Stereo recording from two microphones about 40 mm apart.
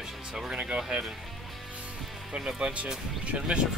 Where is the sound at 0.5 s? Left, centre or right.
Right.